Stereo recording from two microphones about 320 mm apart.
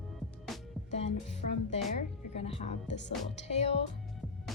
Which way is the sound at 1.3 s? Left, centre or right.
Left.